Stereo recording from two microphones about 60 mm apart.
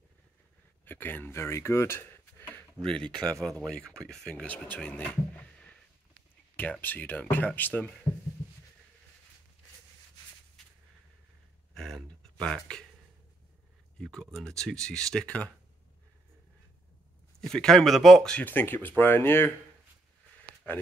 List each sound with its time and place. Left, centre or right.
0.8 s speech: left
2.8 s speech: centre
4.5 s speech: left
11.7 s a sound: centre
14.1 s speech: centre
17.4 s speech: centre
18.4 s speech: left